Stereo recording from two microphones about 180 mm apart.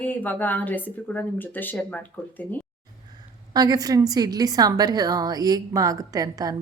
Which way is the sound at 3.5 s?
20° right (ahead or behind).